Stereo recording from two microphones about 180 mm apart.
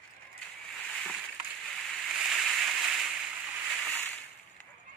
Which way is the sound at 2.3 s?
Centre (ahead or behind).